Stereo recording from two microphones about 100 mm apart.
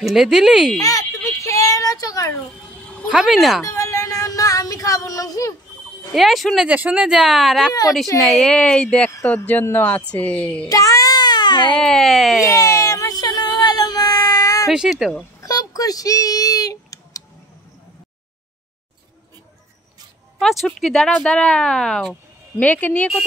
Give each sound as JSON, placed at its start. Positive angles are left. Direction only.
{"t": 0.0, "sound": "speech", "side_deg": -5}
{"t": 0.7, "sound": "a sound", "side_deg": 35}
{"t": 3.1, "sound": "speech", "side_deg": -5}
{"t": 3.6, "sound": "music", "side_deg": 30}
{"t": 6.1, "sound": "speech", "side_deg": 0}
{"t": 6.7, "sound": "speech", "side_deg": -10}
{"t": 10.7, "sound": "a sound", "side_deg": 35}
{"t": 11.8, "sound": "speech", "side_deg": 5}
{"t": 12.6, "sound": "a sound", "side_deg": 30}
{"t": 14.7, "sound": "speech", "side_deg": -5}
{"t": 15.4, "sound": "a sound", "side_deg": 35}
{"t": 20.8, "sound": "speech", "side_deg": 5}